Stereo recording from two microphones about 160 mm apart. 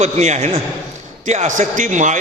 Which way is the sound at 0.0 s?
45° right (ahead or behind).